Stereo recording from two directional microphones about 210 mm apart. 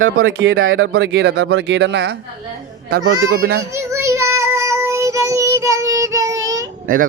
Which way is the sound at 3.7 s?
15° right (ahead or behind).